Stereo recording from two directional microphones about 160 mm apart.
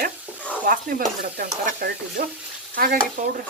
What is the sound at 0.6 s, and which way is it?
Speech, 60° right (ahead or behind).